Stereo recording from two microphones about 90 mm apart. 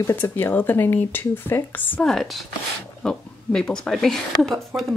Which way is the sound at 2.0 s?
5° left (ahead or behind).